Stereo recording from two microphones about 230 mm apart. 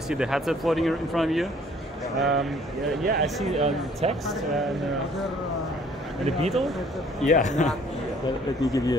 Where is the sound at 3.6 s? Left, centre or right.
Right.